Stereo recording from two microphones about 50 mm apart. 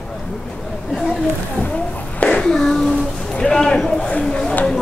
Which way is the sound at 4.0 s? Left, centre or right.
Centre.